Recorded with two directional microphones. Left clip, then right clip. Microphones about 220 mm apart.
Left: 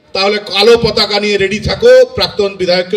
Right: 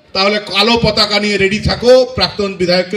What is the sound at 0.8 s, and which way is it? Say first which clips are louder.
A man's voice: left 1 dB; 55° left (ahead or behind).